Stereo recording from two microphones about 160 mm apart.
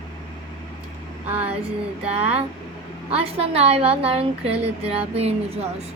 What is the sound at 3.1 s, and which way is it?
A woman's voice, 40° right (ahead or behind).